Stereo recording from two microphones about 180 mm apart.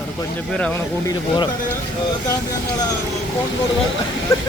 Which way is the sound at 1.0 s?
25° left (ahead or behind).